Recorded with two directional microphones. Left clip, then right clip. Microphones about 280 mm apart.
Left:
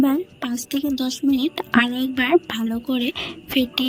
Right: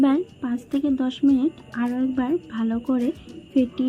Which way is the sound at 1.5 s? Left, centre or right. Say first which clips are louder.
Left 8 dB; left.